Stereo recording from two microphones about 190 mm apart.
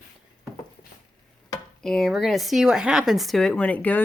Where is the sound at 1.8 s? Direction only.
Centre (ahead or behind).